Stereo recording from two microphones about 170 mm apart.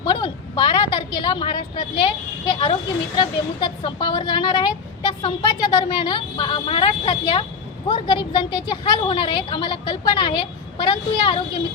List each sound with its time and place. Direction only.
0.0 s a woman's voice: 30° left (ahead or behind)